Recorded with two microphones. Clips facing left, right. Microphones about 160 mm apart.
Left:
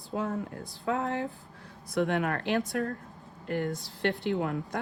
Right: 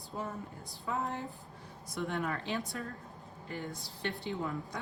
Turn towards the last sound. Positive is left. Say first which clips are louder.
# left 7 dB
turn(degrees=80)